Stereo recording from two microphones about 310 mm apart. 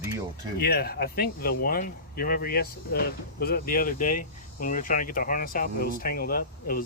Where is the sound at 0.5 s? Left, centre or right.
Left.